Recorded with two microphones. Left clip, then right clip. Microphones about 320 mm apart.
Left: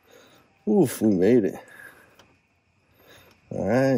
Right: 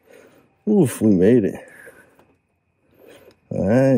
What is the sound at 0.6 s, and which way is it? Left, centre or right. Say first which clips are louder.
Speech: right 3 dB; right.